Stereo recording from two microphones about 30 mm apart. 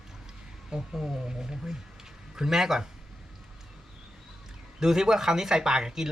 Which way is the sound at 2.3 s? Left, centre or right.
Centre.